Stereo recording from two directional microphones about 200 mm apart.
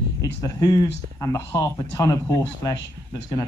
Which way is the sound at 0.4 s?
20° left (ahead or behind).